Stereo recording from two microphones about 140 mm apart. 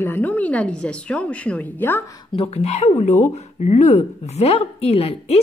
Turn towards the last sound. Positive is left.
turn(degrees=45)  # may be behind; listen again after turning